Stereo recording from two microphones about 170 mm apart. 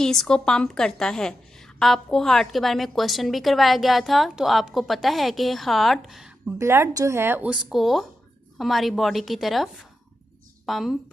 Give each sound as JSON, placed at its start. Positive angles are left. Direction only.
{"t": 0.0, "sound": "a woman's voice", "side_deg": 5}
{"t": 6.6, "sound": "a woman's voice", "side_deg": -15}